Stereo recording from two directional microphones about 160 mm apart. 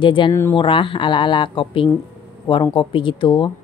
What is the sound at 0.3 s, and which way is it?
Speech, 15° left (ahead or behind).